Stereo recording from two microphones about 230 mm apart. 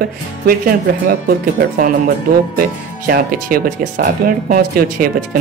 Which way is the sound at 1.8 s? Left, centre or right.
Right.